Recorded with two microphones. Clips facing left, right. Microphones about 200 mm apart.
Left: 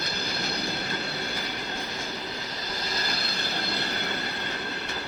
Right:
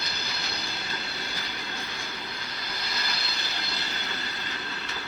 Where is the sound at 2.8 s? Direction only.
45° left (ahead or behind).